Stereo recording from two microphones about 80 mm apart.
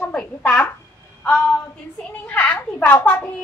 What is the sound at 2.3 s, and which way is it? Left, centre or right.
A woman's voice, left.